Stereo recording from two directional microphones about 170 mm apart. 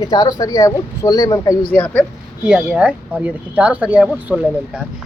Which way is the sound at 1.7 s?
10° left (ahead or behind).